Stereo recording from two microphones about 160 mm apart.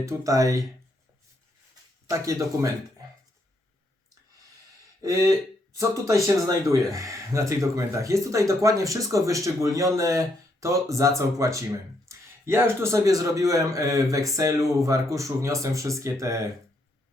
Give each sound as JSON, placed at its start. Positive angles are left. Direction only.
{"t": 0.0, "sound": "speech", "side_deg": -20}
{"t": 2.0, "sound": "speech", "side_deg": -20}
{"t": 5.0, "sound": "speech", "side_deg": -20}